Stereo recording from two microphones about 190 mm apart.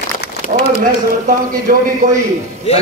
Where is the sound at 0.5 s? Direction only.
45° right (ahead or behind).